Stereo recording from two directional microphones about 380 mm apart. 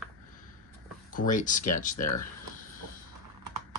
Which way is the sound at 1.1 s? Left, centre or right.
Left.